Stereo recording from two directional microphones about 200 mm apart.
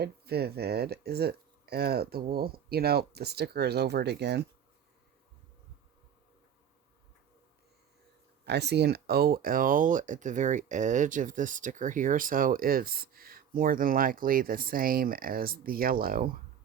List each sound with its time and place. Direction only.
0.0 s speech: 50° right (ahead or behind)
8.4 s speech: 55° right (ahead or behind)